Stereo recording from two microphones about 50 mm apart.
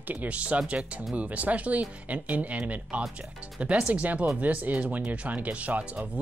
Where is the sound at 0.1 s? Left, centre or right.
Right.